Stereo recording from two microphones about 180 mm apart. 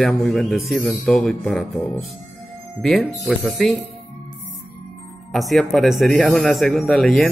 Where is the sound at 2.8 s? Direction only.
Centre (ahead or behind).